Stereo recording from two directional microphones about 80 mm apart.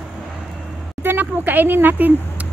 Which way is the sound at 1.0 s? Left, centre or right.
Right.